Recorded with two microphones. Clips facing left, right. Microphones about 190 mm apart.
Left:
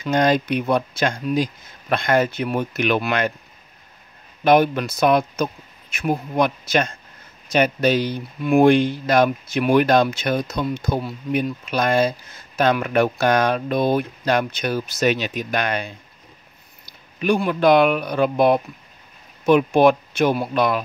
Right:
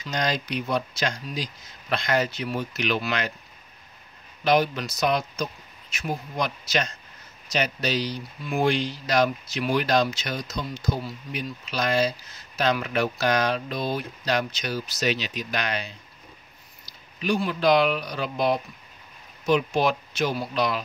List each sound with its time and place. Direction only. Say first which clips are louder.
0.0 s speech: left 9 dB; 55° left (ahead or behind)
4.5 s speech: left 6 dB; 55° left (ahead or behind)